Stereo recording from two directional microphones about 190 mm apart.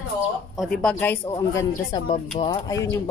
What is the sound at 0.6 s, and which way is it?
A woman's voice, 5° left (ahead or behind).